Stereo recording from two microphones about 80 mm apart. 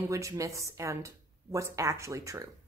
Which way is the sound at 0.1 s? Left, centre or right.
Right.